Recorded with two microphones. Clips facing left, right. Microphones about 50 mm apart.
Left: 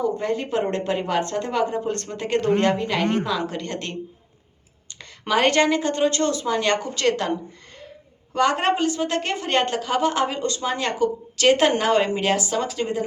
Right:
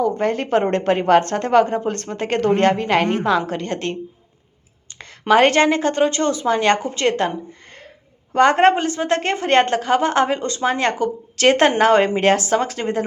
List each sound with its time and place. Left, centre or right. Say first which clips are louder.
0.0 s a woman's voice: right 4 dB; right
5.3 s a woman's voice: right 5 dB; right
8.3 s a woman's voice: right 7 dB; right